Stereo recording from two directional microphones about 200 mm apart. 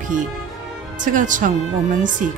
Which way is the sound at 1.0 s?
40° right (ahead or behind).